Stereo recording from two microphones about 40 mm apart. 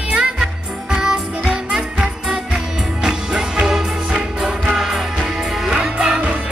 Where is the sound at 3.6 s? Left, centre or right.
Centre.